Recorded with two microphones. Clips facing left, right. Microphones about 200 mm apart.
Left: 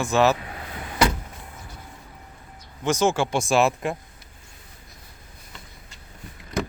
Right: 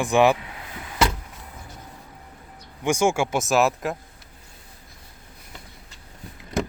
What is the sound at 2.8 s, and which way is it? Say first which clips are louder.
Speech: even; 10° right (ahead or behind).